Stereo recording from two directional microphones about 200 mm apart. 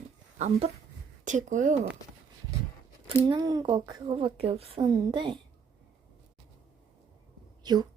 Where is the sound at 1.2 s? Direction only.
40° right (ahead or behind).